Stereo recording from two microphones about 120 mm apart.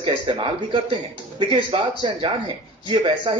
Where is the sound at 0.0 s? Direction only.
45° right (ahead or behind).